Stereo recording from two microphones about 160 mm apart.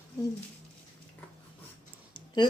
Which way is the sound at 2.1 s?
30° left (ahead or behind).